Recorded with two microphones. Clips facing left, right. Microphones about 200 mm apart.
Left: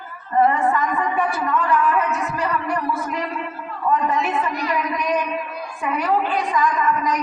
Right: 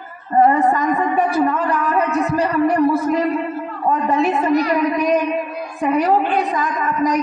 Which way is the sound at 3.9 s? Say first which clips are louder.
Right 3 dB; 35° right (ahead or behind).